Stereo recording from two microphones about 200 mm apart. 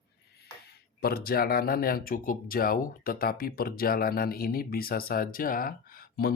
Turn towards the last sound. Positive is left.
turn(degrees=50)  # may be behind; listen again after turning